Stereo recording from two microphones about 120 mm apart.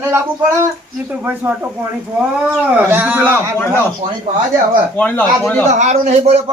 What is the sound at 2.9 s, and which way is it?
Speech, 15° right (ahead or behind).